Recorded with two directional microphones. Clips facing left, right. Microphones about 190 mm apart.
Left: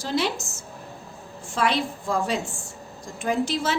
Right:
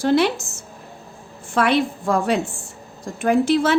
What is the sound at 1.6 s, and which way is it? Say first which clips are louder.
A woman's voice: right 6 dB; 60° right (ahead or behind).